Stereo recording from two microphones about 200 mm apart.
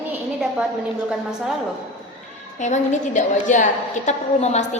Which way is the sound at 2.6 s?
35° left (ahead or behind).